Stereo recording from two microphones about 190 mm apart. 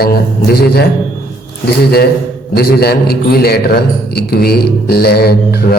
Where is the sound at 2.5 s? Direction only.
55° left (ahead or behind).